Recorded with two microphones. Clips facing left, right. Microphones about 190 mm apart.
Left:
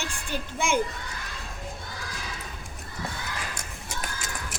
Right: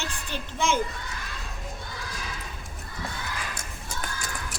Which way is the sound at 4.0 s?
20° left (ahead or behind).